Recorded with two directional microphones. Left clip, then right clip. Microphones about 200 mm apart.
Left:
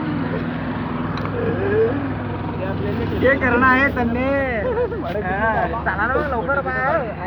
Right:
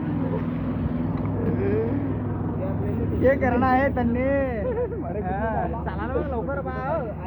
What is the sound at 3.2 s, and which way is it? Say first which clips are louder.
Speech: left 5 dB; 25° right (ahead or behind).